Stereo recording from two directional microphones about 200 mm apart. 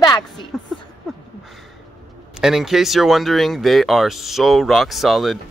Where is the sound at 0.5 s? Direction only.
Centre (ahead or behind).